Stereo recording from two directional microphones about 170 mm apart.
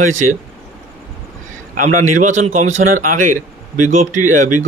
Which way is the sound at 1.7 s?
50° right (ahead or behind).